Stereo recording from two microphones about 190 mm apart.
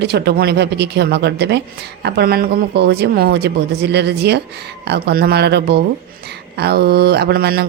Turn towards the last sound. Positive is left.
turn(degrees=-55)  # may be behind; listen again after turning